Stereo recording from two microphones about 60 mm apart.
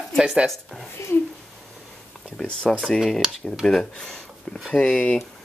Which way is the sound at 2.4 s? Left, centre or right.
Centre.